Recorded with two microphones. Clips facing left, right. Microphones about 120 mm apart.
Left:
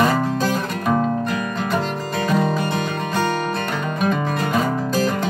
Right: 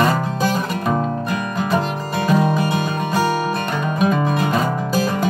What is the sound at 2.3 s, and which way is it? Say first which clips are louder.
Music: right 3 dB; 5° right (ahead or behind).